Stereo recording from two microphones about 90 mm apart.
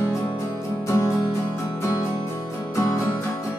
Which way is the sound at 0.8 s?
30° left (ahead or behind).